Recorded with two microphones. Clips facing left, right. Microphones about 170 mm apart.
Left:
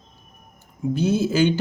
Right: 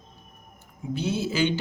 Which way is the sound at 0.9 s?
45° left (ahead or behind).